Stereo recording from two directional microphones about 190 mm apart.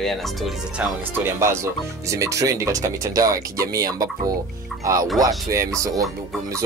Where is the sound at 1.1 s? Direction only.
15° right (ahead or behind).